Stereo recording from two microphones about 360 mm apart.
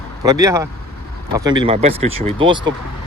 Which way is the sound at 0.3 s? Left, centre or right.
Centre.